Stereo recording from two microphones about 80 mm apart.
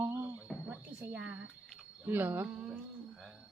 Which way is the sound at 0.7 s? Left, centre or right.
Centre.